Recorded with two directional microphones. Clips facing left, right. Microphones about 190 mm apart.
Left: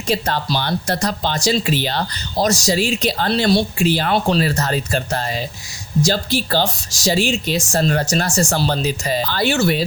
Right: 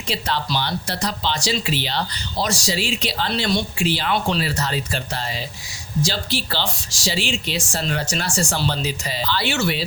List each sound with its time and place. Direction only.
0.1 s speech: 45° left (ahead or behind)